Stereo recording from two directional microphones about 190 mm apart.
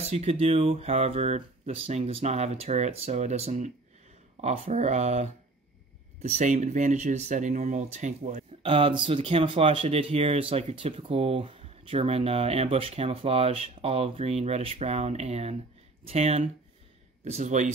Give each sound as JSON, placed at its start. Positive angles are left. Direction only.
{"t": 0.0, "sound": "speech", "side_deg": -35}